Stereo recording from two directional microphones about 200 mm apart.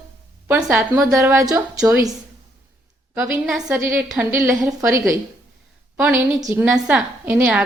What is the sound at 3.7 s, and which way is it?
A woman's voice, 15° right (ahead or behind).